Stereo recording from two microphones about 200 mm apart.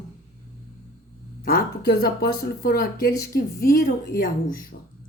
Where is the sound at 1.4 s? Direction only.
45° left (ahead or behind).